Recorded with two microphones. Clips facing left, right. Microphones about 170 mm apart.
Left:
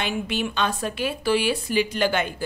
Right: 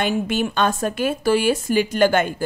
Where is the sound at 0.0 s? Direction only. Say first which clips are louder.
Right 5 dB; 45° right (ahead or behind).